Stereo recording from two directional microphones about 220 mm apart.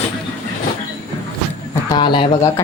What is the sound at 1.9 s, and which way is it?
Speech, 20° left (ahead or behind).